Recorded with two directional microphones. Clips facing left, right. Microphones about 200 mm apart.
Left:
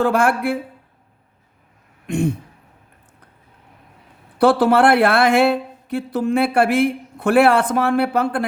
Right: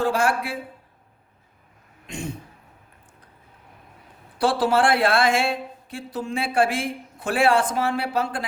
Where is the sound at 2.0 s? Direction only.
60° left (ahead or behind).